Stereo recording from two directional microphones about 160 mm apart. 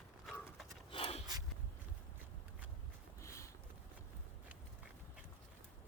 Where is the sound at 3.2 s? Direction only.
20° left (ahead or behind).